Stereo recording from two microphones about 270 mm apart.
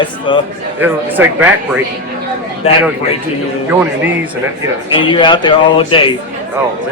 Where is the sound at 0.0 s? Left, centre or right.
Centre.